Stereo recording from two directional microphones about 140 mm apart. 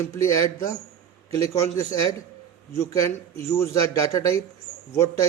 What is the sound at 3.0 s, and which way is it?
Speech, 20° left (ahead or behind).